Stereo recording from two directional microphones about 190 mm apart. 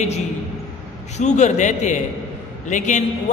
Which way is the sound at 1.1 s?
40° left (ahead or behind).